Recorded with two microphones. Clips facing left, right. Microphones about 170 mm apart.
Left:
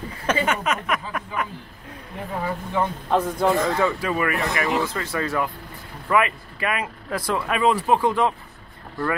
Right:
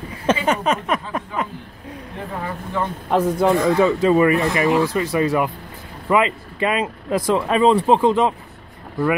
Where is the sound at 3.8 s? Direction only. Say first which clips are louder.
Right 8 dB; 25° right (ahead or behind).